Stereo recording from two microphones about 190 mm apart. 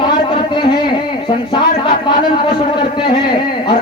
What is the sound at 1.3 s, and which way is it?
Speech, 25° left (ahead or behind).